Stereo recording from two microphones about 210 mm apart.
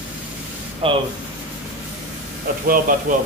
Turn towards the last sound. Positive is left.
turn(degrees=-45)  # may be behind; listen again after turning